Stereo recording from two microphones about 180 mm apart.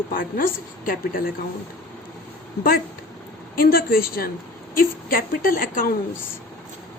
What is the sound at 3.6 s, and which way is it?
A woman's voice, 55° left (ahead or behind).